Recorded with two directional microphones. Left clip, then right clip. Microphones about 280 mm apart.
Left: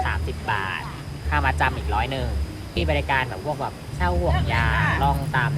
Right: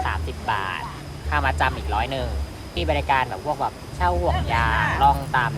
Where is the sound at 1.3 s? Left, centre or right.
Centre.